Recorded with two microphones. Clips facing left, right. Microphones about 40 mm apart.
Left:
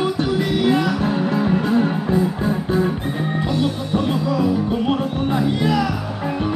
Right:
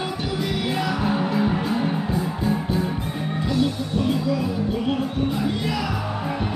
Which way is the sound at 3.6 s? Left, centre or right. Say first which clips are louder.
Even; left.